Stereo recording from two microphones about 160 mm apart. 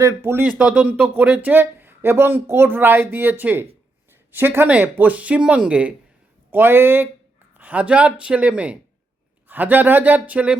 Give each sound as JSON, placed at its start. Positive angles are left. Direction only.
{"t": 0.0, "sound": "speech", "side_deg": -15}